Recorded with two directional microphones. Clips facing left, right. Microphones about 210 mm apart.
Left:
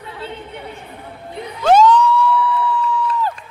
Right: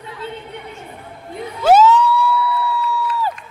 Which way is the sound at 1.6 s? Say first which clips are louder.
Even; 5° right (ahead or behind).